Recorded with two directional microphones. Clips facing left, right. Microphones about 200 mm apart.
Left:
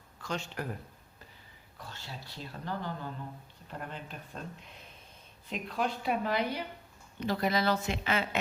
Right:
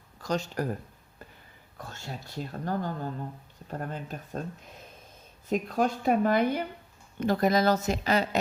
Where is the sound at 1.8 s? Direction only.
50° right (ahead or behind).